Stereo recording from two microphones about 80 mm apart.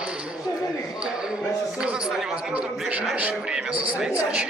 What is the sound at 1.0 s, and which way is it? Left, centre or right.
A man's voice, centre.